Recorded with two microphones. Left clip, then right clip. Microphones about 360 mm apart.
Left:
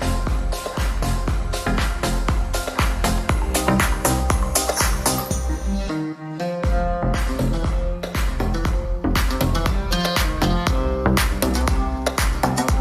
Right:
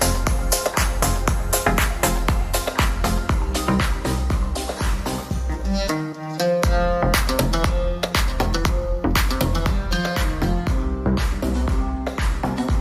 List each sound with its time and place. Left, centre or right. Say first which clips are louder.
1.2 s music: right 5 dB; right
3.0 s music: left 1 dB; centre
6.4 s music: right 5 dB; right
8.0 s music: right 4 dB; centre
9.1 s music: left 2 dB; centre
11.0 s music: left 4 dB; left
12.0 s music: left 6 dB; left